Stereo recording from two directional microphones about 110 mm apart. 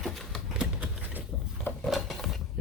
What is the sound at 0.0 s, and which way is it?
Typewriter, centre (ahead or behind).